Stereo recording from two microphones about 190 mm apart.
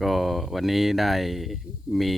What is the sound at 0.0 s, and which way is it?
Speech, centre (ahead or behind).